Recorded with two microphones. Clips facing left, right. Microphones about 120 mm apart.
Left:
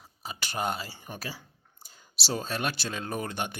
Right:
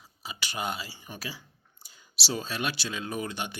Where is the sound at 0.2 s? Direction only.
45° left (ahead or behind).